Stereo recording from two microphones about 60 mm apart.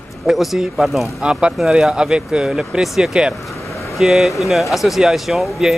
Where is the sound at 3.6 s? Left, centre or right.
Left.